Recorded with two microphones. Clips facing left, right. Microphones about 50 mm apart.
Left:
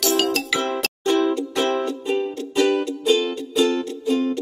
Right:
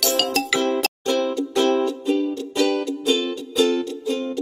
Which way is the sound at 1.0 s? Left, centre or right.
Left.